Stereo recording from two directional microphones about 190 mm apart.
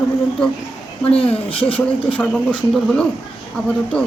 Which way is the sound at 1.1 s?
30° left (ahead or behind).